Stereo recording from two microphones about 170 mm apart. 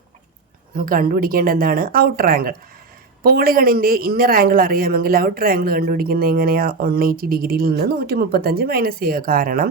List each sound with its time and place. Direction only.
0.8 s a man's voice: 55° right (ahead or behind)